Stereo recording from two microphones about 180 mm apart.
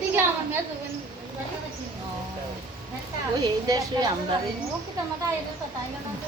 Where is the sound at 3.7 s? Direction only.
20° right (ahead or behind).